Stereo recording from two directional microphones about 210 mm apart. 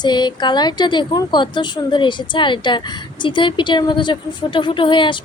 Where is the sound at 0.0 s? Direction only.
20° left (ahead or behind).